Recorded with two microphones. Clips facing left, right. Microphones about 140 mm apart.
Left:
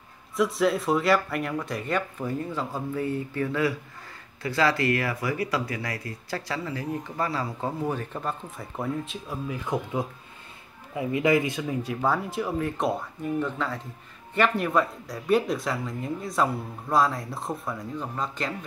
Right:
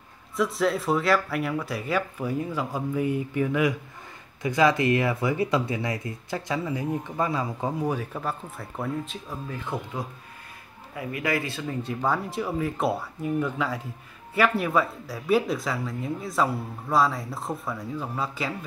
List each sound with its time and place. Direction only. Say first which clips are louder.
0.4 s speech: left 1 dB; centre (ahead or behind)
11.0 s speech: left 5 dB; 20° left (ahead or behind); by 18.7 s 5° right (ahead or behind)